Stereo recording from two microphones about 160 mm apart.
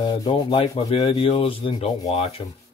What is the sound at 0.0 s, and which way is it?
Speech, 30° left (ahead or behind).